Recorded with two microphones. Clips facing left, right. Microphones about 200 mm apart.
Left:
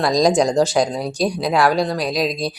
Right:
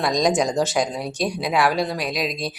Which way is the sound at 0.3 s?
5° right (ahead or behind).